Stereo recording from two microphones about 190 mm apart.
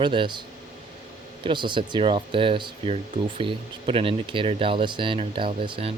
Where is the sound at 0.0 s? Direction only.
25° right (ahead or behind).